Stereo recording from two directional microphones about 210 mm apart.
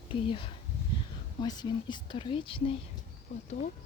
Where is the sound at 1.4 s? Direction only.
20° left (ahead or behind).